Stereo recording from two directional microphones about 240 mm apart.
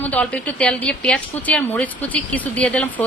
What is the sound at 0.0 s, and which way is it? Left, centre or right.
A woman's voice, centre.